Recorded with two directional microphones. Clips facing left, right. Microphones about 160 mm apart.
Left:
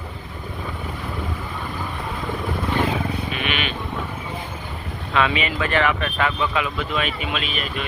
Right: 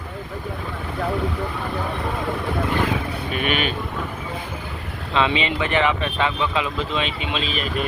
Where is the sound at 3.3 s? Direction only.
45° right (ahead or behind).